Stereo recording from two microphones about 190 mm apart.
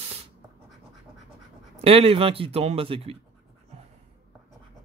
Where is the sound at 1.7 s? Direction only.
30° right (ahead or behind).